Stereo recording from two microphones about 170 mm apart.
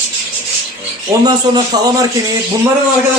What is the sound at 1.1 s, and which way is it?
Speech, 25° right (ahead or behind).